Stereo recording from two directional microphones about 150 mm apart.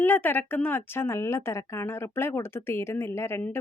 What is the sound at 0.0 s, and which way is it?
Speech, 15° left (ahead or behind).